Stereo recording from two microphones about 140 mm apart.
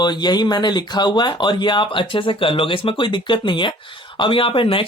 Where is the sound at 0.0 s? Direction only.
30° left (ahead or behind).